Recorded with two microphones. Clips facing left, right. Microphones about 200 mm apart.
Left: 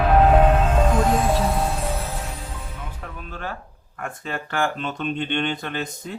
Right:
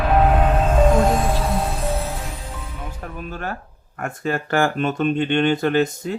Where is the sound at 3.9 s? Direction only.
65° right (ahead or behind).